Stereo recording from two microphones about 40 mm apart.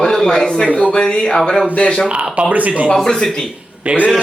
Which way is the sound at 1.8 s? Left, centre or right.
Left.